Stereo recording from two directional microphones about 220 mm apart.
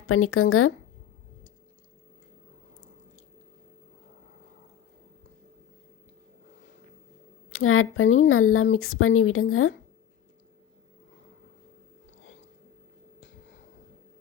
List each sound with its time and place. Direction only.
0.1 s speech: 75° left (ahead or behind)
7.5 s speech: 70° left (ahead or behind)